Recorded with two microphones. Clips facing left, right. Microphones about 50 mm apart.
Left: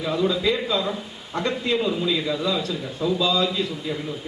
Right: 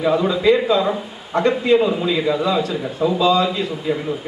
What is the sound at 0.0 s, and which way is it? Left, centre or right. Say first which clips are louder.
A man's voice: right 6 dB; right.